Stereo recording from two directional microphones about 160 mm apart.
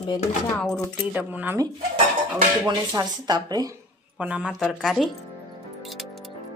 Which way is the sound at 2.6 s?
20° right (ahead or behind).